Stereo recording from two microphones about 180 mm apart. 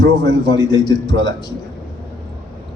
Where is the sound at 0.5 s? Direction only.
20° left (ahead or behind).